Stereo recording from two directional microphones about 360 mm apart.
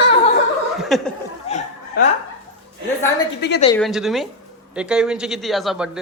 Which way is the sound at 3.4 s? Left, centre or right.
Left.